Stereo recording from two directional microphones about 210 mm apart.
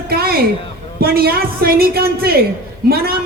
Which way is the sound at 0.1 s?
45° right (ahead or behind).